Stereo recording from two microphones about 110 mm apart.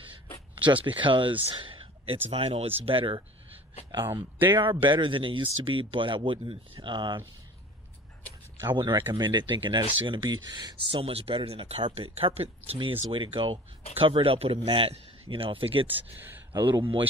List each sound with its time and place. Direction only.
0.6 s speech: 50° right (ahead or behind)
2.2 s speech: 65° right (ahead or behind)
4.0 s speech: 20° right (ahead or behind)
4.8 s speech: 50° right (ahead or behind)
8.6 s speech: 45° right (ahead or behind); by 12.7 s 65° right (ahead or behind)
13.1 s speech: 55° right (ahead or behind)
16.2 s speech: 20° right (ahead or behind)